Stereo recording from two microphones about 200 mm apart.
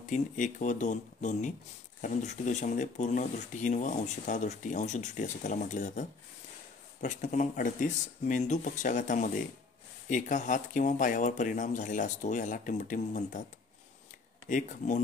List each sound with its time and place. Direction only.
0.1 s speech: 40° left (ahead or behind)
14.5 s speech: 40° left (ahead or behind)